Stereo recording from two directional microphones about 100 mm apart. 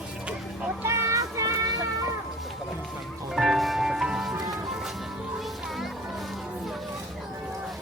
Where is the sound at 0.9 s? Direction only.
30° right (ahead or behind).